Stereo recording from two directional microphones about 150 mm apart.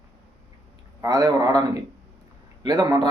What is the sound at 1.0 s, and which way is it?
Speech, 25° right (ahead or behind).